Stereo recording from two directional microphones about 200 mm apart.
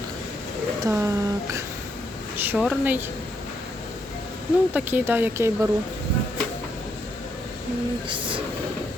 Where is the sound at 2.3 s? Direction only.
10° right (ahead or behind).